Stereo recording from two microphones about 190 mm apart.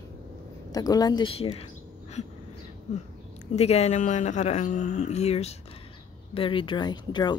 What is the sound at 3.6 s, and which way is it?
Speech, 35° left (ahead or behind).